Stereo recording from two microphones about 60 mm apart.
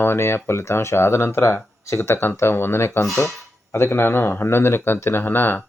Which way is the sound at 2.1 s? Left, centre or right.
Left.